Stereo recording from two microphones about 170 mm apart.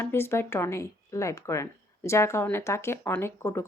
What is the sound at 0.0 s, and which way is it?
Speech, 15° left (ahead or behind).